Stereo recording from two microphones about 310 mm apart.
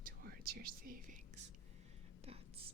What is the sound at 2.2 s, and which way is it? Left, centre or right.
Speech, centre.